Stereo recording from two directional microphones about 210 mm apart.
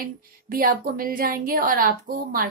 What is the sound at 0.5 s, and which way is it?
A woman's voice, 45° right (ahead or behind).